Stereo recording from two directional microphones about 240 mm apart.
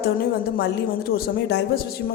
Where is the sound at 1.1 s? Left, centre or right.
Left.